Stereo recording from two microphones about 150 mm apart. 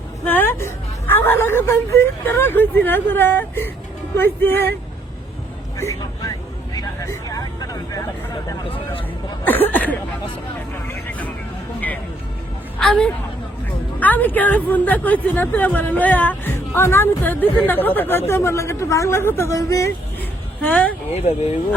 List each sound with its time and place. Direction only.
0.3 s speech: 15° left (ahead or behind)
5.7 s speech: 20° left (ahead or behind)
6.7 s vehicle: 20° left (ahead or behind)
9.5 s speech: 10° left (ahead or behind)
10.8 s vehicle: 10° left (ahead or behind)
12.8 s speech: 5° left (ahead or behind)
20.6 s speech: 10° left (ahead or behind)